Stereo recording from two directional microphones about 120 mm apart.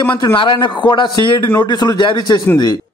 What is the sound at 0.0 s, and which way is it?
A man's voice, 40° left (ahead or behind).